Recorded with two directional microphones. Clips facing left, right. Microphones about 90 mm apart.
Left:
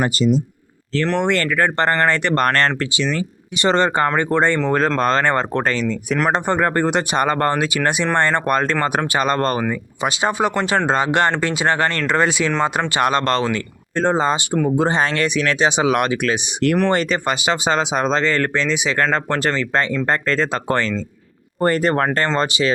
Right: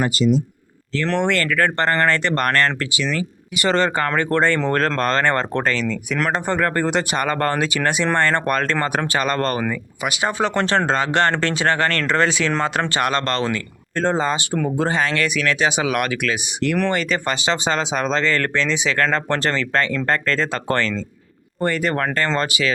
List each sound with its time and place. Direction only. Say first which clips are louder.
1.0 s speech: left 1 dB; 10° left (ahead or behind); by 17.2 s 30° left (ahead or behind)
17.2 s speech: left 2 dB; 15° left (ahead or behind)
21.6 s speech: left 4 dB; 40° left (ahead or behind)